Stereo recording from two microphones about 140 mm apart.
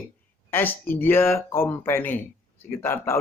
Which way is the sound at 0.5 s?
15° left (ahead or behind).